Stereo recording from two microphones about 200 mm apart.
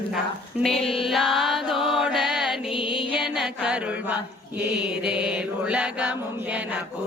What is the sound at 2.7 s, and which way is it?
Music, 25° left (ahead or behind).